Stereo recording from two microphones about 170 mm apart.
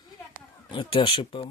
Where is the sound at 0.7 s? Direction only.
30° left (ahead or behind).